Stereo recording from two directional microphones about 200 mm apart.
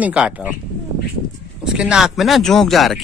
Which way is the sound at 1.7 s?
5° right (ahead or behind).